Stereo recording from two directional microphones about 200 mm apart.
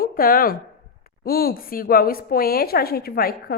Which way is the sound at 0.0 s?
45° left (ahead or behind).